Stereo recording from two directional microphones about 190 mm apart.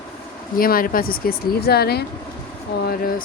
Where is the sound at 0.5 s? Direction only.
50° left (ahead or behind).